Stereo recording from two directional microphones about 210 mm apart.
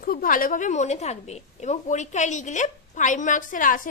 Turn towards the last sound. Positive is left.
turn(degrees=40)  # may be behind; listen again after turning